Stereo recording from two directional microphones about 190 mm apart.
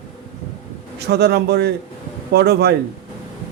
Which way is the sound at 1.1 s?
60° right (ahead or behind).